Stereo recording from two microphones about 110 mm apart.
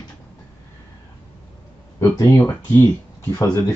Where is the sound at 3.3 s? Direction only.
30° left (ahead or behind).